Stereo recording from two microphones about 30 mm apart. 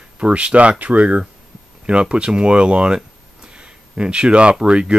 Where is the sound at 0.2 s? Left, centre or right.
Right.